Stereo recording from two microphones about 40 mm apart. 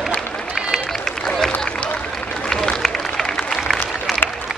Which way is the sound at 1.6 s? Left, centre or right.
Left.